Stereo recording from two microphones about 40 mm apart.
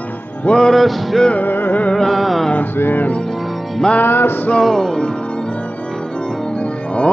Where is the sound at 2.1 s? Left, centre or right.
Centre.